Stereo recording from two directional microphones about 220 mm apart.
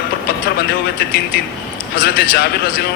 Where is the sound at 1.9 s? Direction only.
45° left (ahead or behind).